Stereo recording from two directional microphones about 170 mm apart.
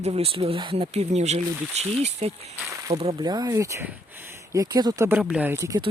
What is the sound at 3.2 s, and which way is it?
Speech, 25° right (ahead or behind).